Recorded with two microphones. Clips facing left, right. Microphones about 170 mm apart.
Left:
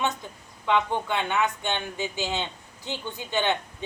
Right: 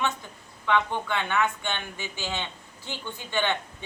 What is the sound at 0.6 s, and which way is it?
Speech, 15° left (ahead or behind).